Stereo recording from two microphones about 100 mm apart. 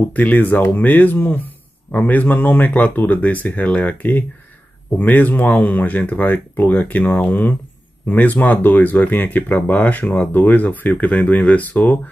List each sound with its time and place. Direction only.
0.1 s speech: 15° left (ahead or behind)